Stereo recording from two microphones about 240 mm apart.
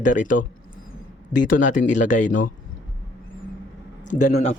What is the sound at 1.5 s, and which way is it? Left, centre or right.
Speech, left.